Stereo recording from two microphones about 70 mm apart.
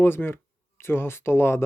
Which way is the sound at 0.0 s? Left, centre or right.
Left.